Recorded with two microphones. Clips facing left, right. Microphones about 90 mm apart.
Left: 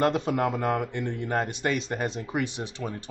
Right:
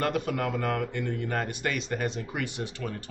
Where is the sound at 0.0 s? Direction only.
25° left (ahead or behind).